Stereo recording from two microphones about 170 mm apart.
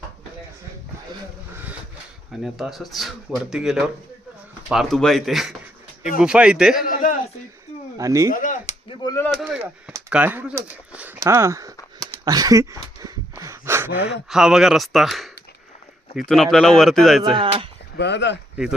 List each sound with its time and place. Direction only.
2.4 s speech: centre (ahead or behind)
6.8 s a sound: 55° left (ahead or behind)
7.9 s speech: 20° right (ahead or behind)
8.3 s a sound: 50° left (ahead or behind)
9.0 s speech: 15° left (ahead or behind)
9.4 s speech: 5° right (ahead or behind)
12.2 s a sound: 20° right (ahead or behind)
13.9 s speech: 70° left (ahead or behind)
14.3 s speech: 5° right (ahead or behind)
17.3 s speech: 30° right (ahead or behind)
17.9 s speech: 90° left